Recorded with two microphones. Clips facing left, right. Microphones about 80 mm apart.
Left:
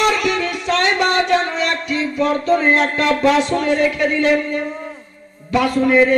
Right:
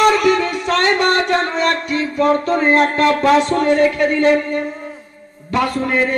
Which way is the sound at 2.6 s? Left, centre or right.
Right.